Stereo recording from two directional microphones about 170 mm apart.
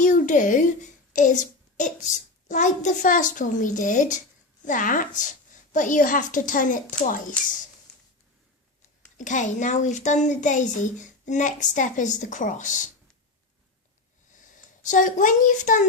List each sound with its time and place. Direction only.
0.0 s a sound: 50° left (ahead or behind)
1.1 s a woman's voice: 50° left (ahead or behind)
9.1 s a woman's voice: 45° left (ahead or behind)
14.5 s a woman's voice: 50° left (ahead or behind)